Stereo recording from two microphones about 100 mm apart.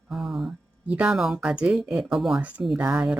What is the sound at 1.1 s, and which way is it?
Speech, 5° right (ahead or behind).